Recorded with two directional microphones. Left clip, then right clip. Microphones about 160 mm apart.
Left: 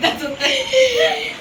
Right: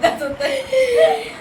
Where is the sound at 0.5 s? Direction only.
45° right (ahead or behind).